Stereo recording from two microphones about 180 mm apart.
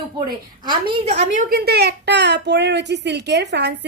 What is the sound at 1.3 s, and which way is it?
A woman's voice, 60° right (ahead or behind).